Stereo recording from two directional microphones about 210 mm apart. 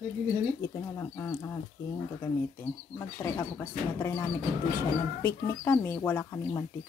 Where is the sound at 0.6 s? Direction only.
10° left (ahead or behind).